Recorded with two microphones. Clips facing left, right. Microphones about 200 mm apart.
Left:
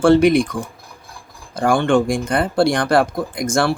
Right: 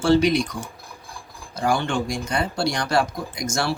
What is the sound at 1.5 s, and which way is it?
Speech, 55° left (ahead or behind).